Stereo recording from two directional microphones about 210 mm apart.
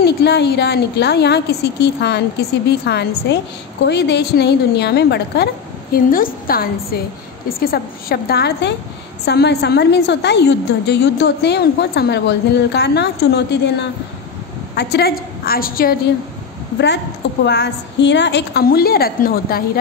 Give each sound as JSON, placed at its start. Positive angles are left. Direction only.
{"t": 0.0, "sound": "a woman's voice", "side_deg": 50}